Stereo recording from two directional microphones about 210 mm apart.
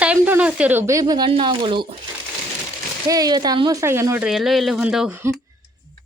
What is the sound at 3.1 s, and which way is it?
Speech, 20° right (ahead or behind).